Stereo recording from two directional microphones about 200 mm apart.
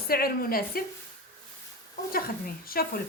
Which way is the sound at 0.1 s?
45° left (ahead or behind).